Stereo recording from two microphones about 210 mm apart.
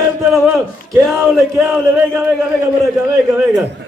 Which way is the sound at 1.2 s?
Centre (ahead or behind).